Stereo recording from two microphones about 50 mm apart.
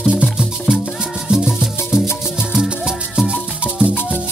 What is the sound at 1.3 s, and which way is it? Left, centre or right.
Music, centre.